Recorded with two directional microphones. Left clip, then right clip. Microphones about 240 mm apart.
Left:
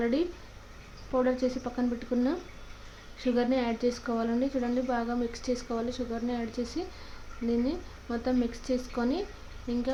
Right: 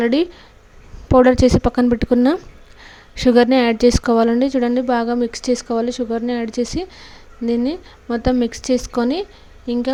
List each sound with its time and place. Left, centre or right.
0.0 s a woman's voice: right